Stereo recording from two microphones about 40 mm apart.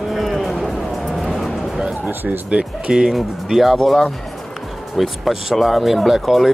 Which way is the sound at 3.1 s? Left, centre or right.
Centre.